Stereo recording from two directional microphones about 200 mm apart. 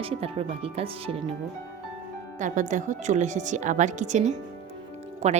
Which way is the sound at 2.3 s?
40° right (ahead or behind).